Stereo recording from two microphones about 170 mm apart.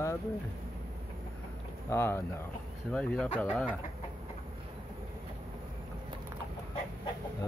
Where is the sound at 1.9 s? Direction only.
15° left (ahead or behind).